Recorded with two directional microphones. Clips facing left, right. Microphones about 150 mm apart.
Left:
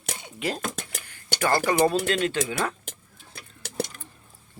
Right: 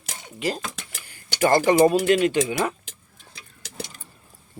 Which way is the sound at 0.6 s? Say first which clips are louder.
Left 3 dB; 50° left (ahead or behind).